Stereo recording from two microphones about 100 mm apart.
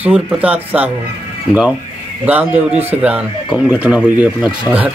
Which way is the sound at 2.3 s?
15° right (ahead or behind).